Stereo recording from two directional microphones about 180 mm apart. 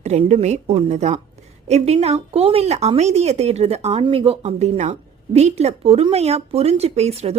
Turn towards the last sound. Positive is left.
turn(degrees=-35)  # may be behind; listen again after turning